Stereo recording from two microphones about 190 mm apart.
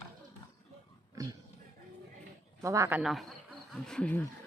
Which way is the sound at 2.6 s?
15° right (ahead or behind).